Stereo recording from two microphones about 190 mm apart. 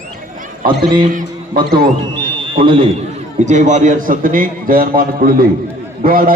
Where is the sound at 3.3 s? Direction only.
40° right (ahead or behind).